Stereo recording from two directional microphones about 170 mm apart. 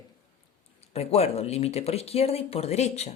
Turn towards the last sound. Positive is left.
turn(degrees=40)  # may be behind; listen again after turning